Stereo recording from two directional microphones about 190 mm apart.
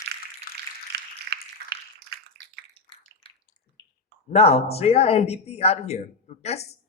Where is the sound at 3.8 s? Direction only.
25° right (ahead or behind).